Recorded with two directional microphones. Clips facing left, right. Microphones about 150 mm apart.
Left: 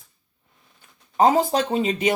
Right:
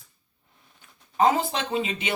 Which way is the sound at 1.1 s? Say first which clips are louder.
Left 4 dB; 40° left (ahead or behind).